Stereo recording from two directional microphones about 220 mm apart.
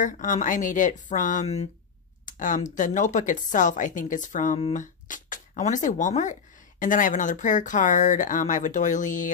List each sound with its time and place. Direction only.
0.0 s speech: 35° left (ahead or behind)